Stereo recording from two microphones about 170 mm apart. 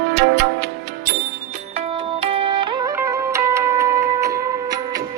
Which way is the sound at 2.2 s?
30° right (ahead or behind).